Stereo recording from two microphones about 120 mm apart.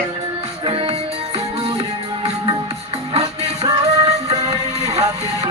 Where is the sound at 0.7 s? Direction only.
50° right (ahead or behind).